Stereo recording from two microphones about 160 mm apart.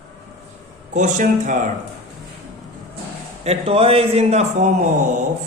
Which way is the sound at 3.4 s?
35° right (ahead or behind).